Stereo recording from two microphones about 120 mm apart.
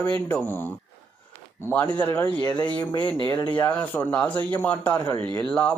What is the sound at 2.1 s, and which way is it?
Speech, 15° left (ahead or behind).